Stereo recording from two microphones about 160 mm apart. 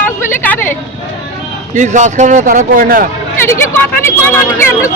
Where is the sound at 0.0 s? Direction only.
10° left (ahead or behind).